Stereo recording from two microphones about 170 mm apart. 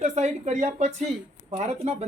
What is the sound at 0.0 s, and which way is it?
Speech, 40° right (ahead or behind).